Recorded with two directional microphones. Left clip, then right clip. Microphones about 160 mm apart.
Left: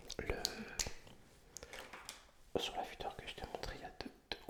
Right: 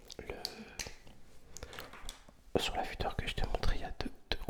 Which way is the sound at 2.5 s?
30° right (ahead or behind).